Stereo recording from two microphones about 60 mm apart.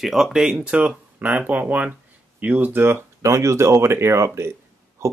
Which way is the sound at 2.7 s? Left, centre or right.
Right.